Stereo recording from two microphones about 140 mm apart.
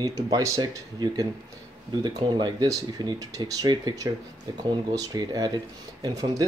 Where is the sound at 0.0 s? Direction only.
25° right (ahead or behind).